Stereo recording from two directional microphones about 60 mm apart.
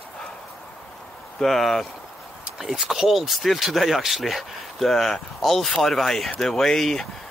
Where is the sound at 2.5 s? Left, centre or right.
Centre.